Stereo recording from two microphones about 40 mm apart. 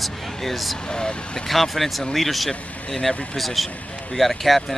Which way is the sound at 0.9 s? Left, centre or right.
Left.